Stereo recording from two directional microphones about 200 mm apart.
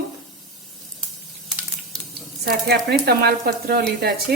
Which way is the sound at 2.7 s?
50° right (ahead or behind).